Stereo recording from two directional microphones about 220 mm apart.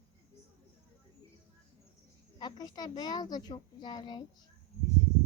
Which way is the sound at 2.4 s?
20° left (ahead or behind).